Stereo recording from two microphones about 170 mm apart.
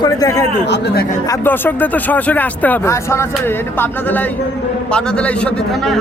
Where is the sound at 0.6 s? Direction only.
90° left.